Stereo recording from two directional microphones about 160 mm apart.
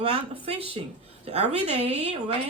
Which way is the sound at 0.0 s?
40° right (ahead or behind).